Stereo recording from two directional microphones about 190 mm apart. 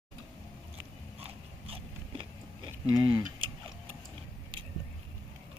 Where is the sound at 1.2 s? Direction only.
30° right (ahead or behind).